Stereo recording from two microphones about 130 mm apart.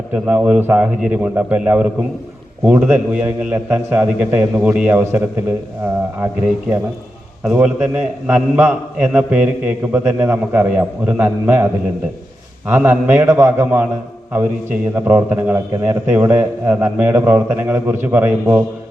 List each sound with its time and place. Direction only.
0.1 s a man's voice: 10° right (ahead or behind)